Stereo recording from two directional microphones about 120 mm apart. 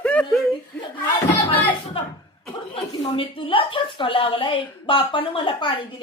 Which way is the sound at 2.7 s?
50° left (ahead or behind).